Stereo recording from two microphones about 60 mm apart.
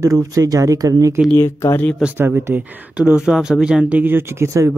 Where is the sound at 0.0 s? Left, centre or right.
Right.